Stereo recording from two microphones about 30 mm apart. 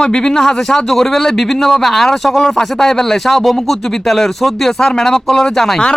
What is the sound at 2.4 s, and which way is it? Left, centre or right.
Speech, centre.